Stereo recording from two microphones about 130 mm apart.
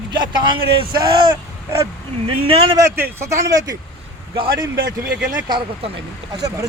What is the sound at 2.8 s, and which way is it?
Speech, 20° right (ahead or behind).